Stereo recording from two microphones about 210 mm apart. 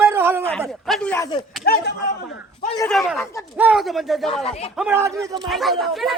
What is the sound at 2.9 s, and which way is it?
Speech, centre (ahead or behind).